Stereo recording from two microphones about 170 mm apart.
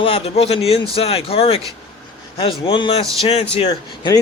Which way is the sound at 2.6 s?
30° left (ahead or behind).